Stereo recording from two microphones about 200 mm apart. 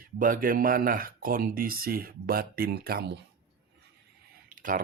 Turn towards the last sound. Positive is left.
turn(degrees=-40)  # may be behind; listen again after turning